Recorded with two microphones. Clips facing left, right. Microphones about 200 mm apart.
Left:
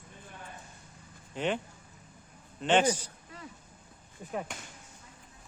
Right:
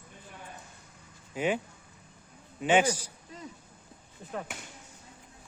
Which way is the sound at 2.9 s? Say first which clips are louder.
Right 2 dB; 15° right (ahead or behind).